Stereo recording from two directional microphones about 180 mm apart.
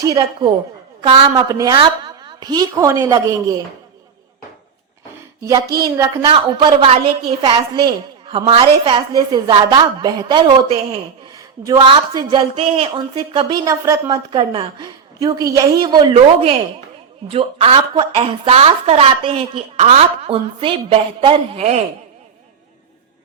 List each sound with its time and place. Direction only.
0.0 s a woman's voice: 20° right (ahead or behind)
5.7 s a woman's voice: 25° right (ahead or behind)
11.6 s a woman's voice: 20° right (ahead or behind); by 21.8 s 40° right (ahead or behind)